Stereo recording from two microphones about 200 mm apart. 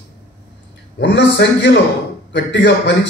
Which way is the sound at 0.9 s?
60° left (ahead or behind).